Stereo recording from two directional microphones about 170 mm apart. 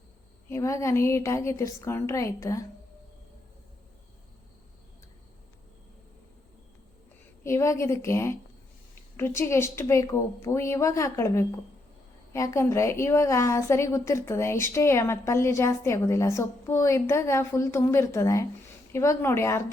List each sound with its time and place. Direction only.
0.5 s a woman's voice: 15° left (ahead or behind)
7.4 s a woman's voice: 15° left (ahead or behind)